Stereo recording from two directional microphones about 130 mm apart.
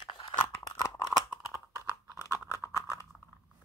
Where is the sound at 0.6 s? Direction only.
25° left (ahead or behind).